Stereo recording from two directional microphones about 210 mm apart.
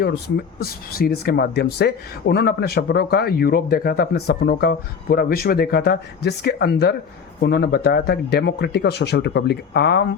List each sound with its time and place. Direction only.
0.6 s speech: 45° left (ahead or behind)